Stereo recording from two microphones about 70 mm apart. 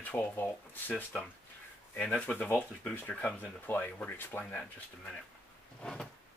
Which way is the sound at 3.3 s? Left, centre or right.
Left.